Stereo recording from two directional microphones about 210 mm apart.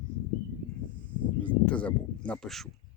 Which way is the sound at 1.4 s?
5° left (ahead or behind).